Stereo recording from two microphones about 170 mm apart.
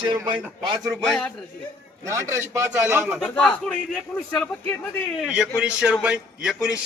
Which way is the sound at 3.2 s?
5° left (ahead or behind).